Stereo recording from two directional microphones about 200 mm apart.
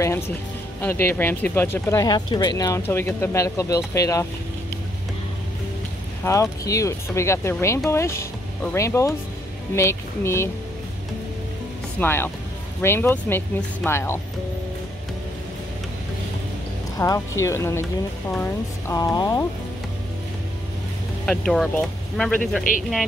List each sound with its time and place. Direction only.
0.8 s speech: 10° left (ahead or behind)
6.2 s speech: 15° left (ahead or behind)
12.0 s speech: 10° left (ahead or behind)
17.0 s speech: 15° left (ahead or behind)
21.5 s speech: centre (ahead or behind)
22.7 s speech: 40° left (ahead or behind)